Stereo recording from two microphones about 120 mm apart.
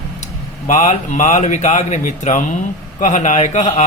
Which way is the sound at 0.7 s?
90° left.